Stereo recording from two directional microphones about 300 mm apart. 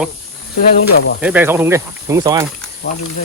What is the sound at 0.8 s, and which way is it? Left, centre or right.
Speech, left.